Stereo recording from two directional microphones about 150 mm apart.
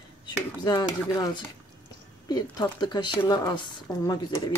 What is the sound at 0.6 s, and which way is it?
Speech, 25° left (ahead or behind).